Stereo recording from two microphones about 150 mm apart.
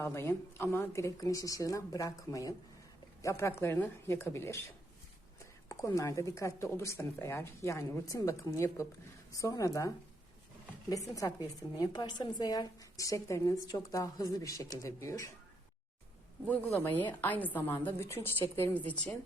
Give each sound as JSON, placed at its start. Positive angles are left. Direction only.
{"t": 0.0, "sound": "a woman's voice", "side_deg": 15}
{"t": 5.6, "sound": "speech", "side_deg": 20}
{"t": 11.1, "sound": "speech", "side_deg": 25}
{"t": 16.5, "sound": "a woman's voice", "side_deg": 10}